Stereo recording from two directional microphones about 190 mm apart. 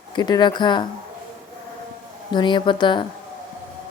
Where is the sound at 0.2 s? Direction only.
25° left (ahead or behind).